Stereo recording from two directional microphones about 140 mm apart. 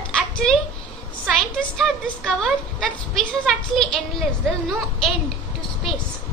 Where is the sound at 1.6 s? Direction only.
5° left (ahead or behind).